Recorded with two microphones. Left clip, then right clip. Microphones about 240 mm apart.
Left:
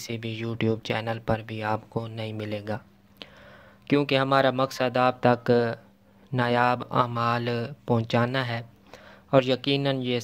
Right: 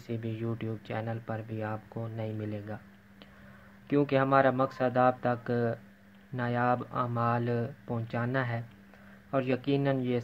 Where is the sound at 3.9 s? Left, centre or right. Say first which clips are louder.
Left 4 dB; left.